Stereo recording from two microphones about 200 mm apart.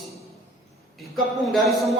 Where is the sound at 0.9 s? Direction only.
Centre (ahead or behind).